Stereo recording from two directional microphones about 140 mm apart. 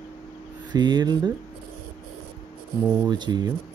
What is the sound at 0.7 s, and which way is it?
Speech, 30° right (ahead or behind).